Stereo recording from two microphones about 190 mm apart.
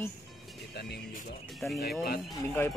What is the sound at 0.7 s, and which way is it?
Speech, 60° left (ahead or behind).